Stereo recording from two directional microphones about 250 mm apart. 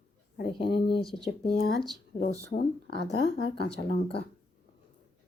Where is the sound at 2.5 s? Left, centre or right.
Left.